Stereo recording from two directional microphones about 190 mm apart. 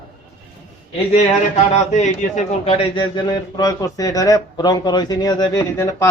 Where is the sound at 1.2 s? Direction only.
35° left (ahead or behind).